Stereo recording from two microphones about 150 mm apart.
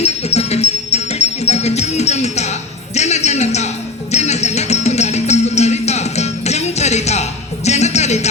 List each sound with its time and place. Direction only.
0.0 s music: 45° left (ahead or behind)